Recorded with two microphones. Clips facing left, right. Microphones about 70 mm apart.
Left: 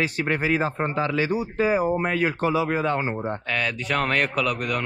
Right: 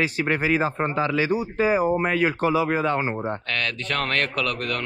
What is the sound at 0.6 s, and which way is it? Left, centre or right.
Speech, right.